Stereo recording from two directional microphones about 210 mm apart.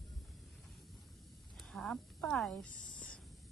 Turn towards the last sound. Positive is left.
turn(degrees=5)  # may be behind; listen again after turning